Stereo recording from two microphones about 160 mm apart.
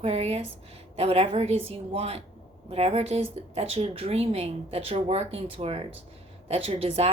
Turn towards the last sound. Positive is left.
turn(degrees=-40)  # may be behind; listen again after turning